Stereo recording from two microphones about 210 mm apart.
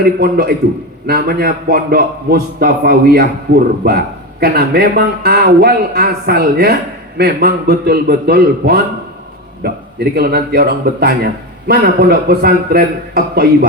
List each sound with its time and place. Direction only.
0.0 s a man's voice: 45° right (ahead or behind)